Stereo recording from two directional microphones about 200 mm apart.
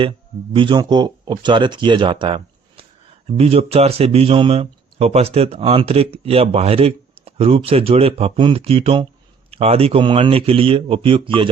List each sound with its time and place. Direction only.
0.5 s speech: 25° right (ahead or behind)